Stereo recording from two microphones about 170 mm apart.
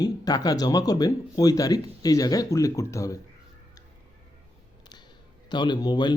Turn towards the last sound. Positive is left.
turn(degrees=25)  # may be behind; listen again after turning